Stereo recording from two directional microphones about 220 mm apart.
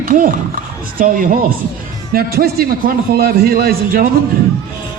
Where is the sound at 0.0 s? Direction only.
40° right (ahead or behind).